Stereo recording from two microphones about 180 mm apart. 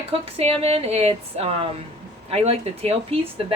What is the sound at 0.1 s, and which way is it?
Speech, 35° right (ahead or behind).